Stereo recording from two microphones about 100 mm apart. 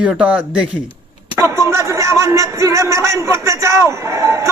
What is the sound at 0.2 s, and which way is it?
Speech, 10° right (ahead or behind).